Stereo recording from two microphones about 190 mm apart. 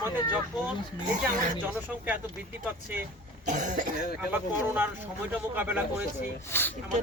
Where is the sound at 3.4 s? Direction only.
40° right (ahead or behind).